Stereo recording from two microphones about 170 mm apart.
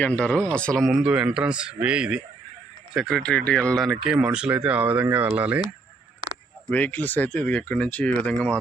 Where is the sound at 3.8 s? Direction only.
10° right (ahead or behind).